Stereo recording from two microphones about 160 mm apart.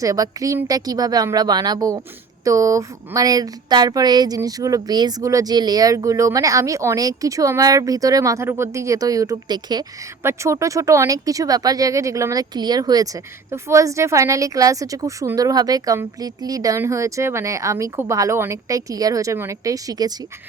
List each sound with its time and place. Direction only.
0.0 s speech: 20° right (ahead or behind)